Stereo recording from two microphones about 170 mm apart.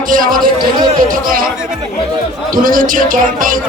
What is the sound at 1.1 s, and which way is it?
Speech, 55° right (ahead or behind).